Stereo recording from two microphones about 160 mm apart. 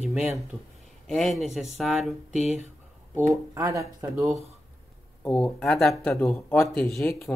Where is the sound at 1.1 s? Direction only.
Centre (ahead or behind).